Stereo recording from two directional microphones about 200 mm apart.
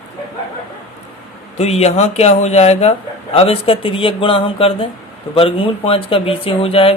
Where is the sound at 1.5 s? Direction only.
30° left (ahead or behind).